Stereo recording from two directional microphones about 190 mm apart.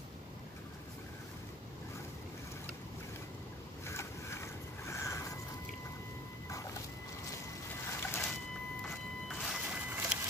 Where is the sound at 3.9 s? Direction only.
15° left (ahead or behind).